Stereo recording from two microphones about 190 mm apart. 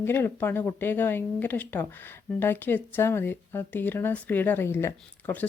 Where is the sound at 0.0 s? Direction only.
10° left (ahead or behind).